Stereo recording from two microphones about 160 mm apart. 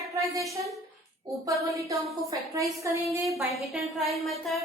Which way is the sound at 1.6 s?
20° right (ahead or behind).